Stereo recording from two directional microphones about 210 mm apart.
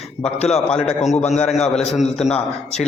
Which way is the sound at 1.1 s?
30° left (ahead or behind).